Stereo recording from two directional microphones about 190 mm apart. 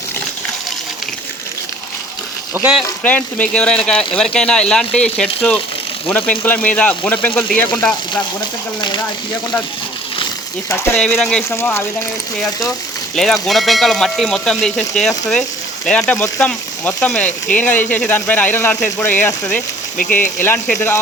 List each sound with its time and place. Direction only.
2.6 s speech: 10° right (ahead or behind)
2.8 s speech: 10° left (ahead or behind)
10.7 s speech: 10° left (ahead or behind)
11.5 s speech: 15° left (ahead or behind)
13.1 s speech: centre (ahead or behind)
20.0 s speech: 45° left (ahead or behind)
20.4 s speech: 10° left (ahead or behind)